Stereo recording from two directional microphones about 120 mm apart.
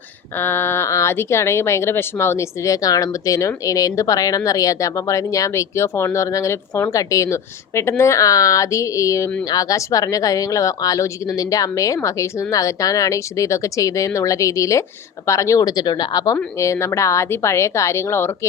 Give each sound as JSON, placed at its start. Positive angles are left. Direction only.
{"t": 0.3, "sound": "speech", "side_deg": 20}